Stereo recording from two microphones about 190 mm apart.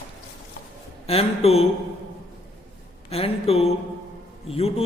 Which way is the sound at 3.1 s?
30° left (ahead or behind).